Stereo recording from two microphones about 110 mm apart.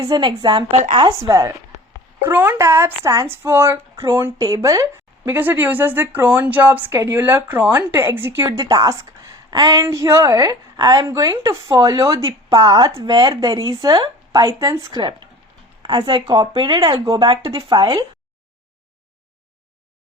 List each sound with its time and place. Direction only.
0.0 s speech: 40° right (ahead or behind)
1.3 s a woman's voice: 30° right (ahead or behind)
2.2 s speech: 20° right (ahead or behind)
8.5 s a woman's voice: 35° right (ahead or behind)
14.4 s a woman's voice: 30° right (ahead or behind)
15.8 s a sound: 35° right (ahead or behind)
16.0 s speech: 50° right (ahead or behind)